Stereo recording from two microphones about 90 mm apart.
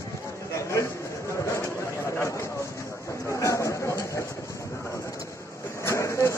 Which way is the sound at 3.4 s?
35° left (ahead or behind).